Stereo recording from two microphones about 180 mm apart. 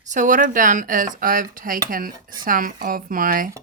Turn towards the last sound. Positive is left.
turn(degrees=-50)  # may be behind; listen again after turning